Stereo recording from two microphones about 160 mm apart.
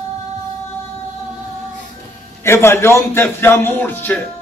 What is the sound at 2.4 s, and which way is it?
Speech, 15° left (ahead or behind).